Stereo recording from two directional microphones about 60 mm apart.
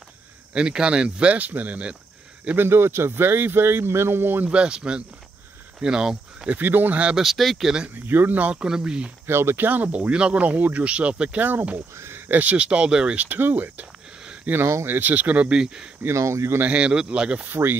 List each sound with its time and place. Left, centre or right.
0.6 s speech: centre
2.5 s speech: right
4.5 s speech: centre
6.5 s speech: right
7.2 s speech: centre
7.9 s speech: right; by 9.1 s centre
9.2 s speech: right
12.0 s speech: right
14.2 s a sound: centre
14.9 s speech: right; by 15.9 s centre
16.1 s speech: right
16.5 s speech: right
17.5 s speech: right